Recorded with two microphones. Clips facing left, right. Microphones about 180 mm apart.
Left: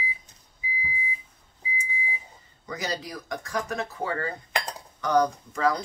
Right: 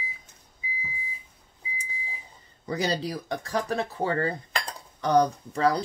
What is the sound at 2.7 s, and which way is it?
Speech, 30° right (ahead or behind).